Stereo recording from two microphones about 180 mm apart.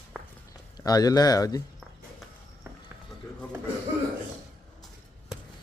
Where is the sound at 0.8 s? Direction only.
20° left (ahead or behind).